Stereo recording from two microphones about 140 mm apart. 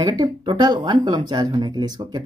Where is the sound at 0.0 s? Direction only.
30° right (ahead or behind).